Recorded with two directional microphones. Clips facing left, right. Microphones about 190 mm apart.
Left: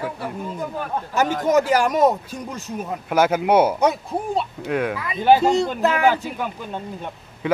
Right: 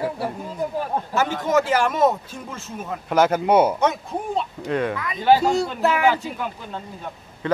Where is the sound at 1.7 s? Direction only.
15° left (ahead or behind).